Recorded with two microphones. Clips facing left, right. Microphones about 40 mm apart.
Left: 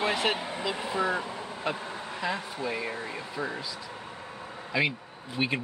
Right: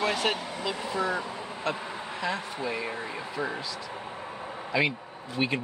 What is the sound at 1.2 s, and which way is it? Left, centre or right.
Vehicle, centre.